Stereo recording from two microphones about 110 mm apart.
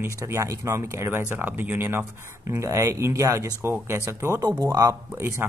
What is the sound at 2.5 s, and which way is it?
Speech, 25° right (ahead or behind).